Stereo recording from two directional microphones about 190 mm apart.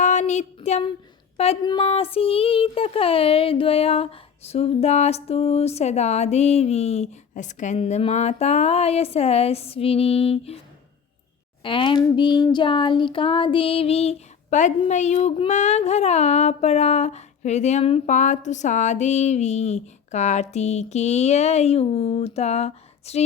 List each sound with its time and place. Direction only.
0.0 s a sound: 40° left (ahead or behind)
1.6 s child singing: 25° left (ahead or behind)
11.6 s speech: 25° left (ahead or behind)
12.0 s child singing: 25° left (ahead or behind)